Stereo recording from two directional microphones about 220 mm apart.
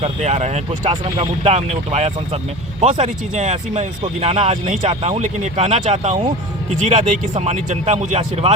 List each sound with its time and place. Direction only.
0.0 s speech: 30° right (ahead or behind)